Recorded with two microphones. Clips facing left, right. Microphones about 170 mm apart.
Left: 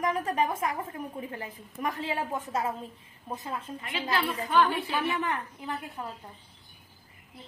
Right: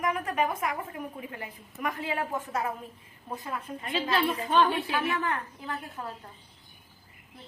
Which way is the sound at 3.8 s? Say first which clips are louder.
Right 3 dB; 30° right (ahead or behind).